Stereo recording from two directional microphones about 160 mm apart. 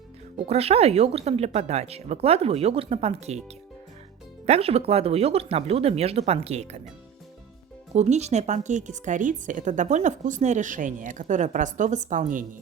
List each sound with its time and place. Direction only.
0.4 s speech: 40° right (ahead or behind)
4.4 s speech: 40° right (ahead or behind)
7.9 s speech: 45° right (ahead or behind)